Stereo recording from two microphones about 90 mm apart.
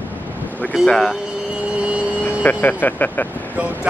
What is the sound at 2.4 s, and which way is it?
Speech, 20° left (ahead or behind).